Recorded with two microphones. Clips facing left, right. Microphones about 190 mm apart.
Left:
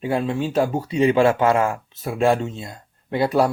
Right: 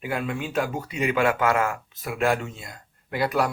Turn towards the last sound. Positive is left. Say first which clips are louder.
# left 5 dB
turn(degrees=30)  # may be behind; listen again after turning